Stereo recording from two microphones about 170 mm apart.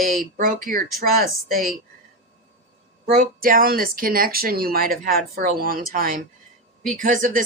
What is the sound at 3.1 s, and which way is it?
Speech, 55° right (ahead or behind).